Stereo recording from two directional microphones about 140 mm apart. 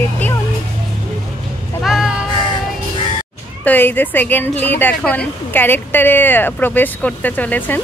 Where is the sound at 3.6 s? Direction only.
15° left (ahead or behind).